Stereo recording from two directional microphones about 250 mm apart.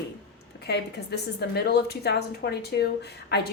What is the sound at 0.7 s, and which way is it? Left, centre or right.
A woman's voice, left.